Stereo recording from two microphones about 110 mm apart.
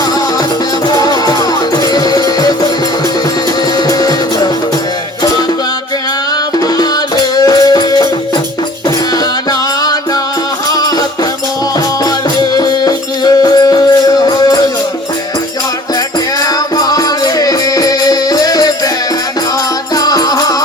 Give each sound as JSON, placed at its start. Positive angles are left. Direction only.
{"t": 0.9, "sound": "music", "side_deg": 35}
{"t": 3.8, "sound": "music", "side_deg": 35}
{"t": 7.3, "sound": "music", "side_deg": 35}
{"t": 9.5, "sound": "music", "side_deg": 35}
{"t": 12.0, "sound": "music", "side_deg": 35}
{"t": 16.4, "sound": "music", "side_deg": 35}
{"t": 20.0, "sound": "music", "side_deg": 35}